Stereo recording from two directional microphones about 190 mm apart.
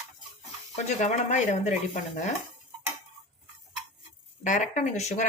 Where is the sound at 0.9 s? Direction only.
40° left (ahead or behind).